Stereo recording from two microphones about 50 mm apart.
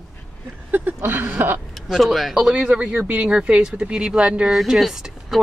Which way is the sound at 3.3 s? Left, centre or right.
Centre.